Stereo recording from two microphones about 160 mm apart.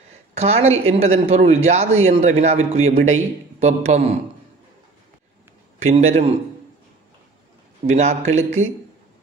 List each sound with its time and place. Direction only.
0.3 s speech: 40° right (ahead or behind)
5.8 s speech: 45° right (ahead or behind)
7.8 s speech: 45° right (ahead or behind)